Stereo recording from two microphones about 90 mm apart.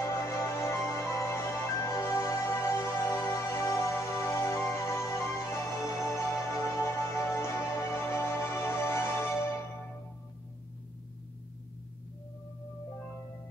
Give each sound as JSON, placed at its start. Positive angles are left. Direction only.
{"t": 0.0, "sound": "music", "side_deg": 35}